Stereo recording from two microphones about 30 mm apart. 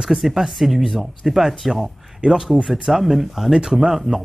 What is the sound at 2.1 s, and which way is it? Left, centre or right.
Speech, right.